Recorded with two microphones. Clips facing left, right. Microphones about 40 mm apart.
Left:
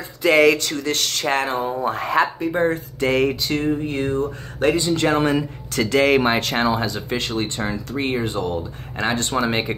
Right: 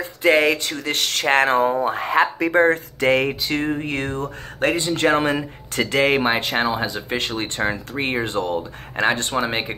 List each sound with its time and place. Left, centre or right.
0.3 s speech: centre; by 1.7 s right
1.7 s speech: right
2.3 s speech: right
2.6 s speech: right
3.3 s speech: right
3.5 s speech: right
3.8 s speech: right
4.6 s speech: right; by 7.1 s centre
7.1 s speech: right
7.4 s speech: right
7.9 s speech: right
8.2 s speech: right
9.3 s speech: centre